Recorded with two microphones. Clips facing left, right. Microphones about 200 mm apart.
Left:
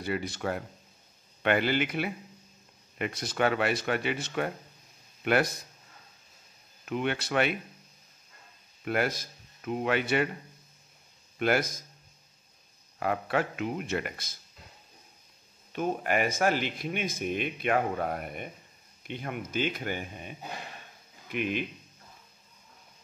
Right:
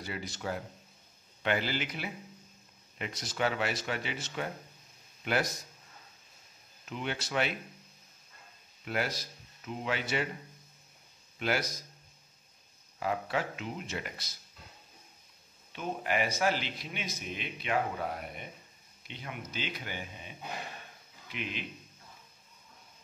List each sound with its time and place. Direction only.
0.0 s speech: 60° left (ahead or behind)
6.9 s speech: 60° left (ahead or behind)
8.8 s speech: 55° left (ahead or behind)
11.3 s a man's voice: 55° left (ahead or behind)
13.0 s speech: 60° left (ahead or behind)
15.7 s speech: 50° left (ahead or behind)